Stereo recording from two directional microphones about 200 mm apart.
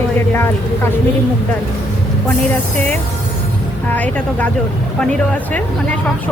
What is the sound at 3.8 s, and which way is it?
Speech, 10° left (ahead or behind).